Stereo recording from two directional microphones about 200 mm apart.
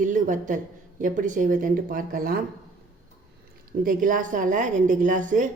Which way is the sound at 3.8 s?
40° right (ahead or behind).